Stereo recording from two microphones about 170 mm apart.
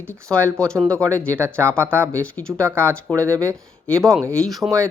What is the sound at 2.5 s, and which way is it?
Speech, 15° right (ahead or behind).